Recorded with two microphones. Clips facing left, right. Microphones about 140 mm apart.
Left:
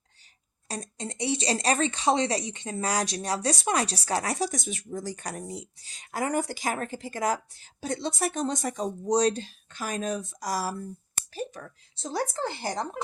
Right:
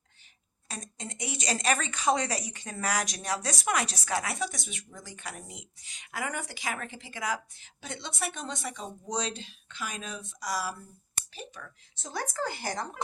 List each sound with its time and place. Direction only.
0.7 s speech: 35° left (ahead or behind)
11.9 s a woman's voice: 30° left (ahead or behind)